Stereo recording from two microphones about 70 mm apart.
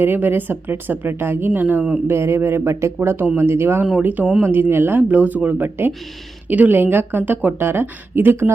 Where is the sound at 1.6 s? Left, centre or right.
Right.